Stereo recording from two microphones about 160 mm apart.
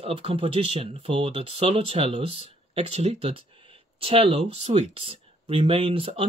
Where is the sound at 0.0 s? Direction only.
35° right (ahead or behind).